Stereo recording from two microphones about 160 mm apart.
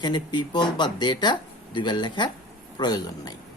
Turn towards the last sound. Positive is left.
turn(degrees=25)  # may be behind; listen again after turning